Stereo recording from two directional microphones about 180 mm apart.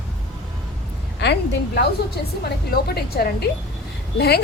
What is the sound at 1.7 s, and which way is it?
A woman's voice, 65° left (ahead or behind).